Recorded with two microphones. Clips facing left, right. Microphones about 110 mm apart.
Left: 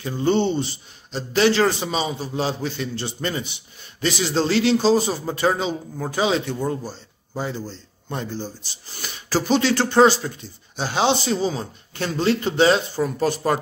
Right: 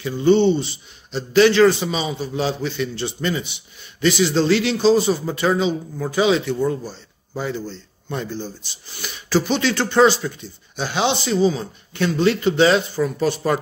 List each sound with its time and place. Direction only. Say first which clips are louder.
0.0 s a man's voice: right 5 dB; 40° left (ahead or behind)